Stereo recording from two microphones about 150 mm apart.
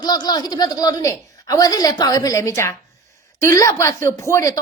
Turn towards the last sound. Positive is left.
turn(degrees=20)  # may be behind; listen again after turning